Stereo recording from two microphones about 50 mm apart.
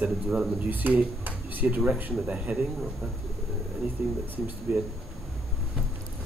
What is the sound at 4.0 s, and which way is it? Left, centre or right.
Speech, right.